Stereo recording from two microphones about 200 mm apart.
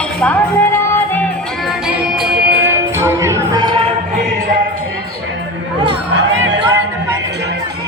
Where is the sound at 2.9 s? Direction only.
15° right (ahead or behind).